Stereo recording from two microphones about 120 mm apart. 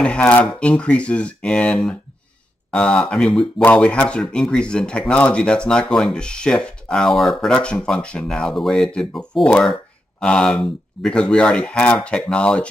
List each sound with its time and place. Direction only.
0.0 s speech: 10° left (ahead or behind)